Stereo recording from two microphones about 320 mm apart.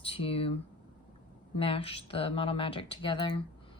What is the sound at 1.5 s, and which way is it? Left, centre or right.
Speech, centre.